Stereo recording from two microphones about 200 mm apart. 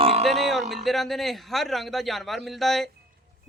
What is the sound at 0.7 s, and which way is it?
A man's voice, centre (ahead or behind).